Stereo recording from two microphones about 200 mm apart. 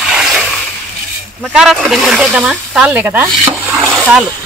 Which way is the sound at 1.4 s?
5° right (ahead or behind).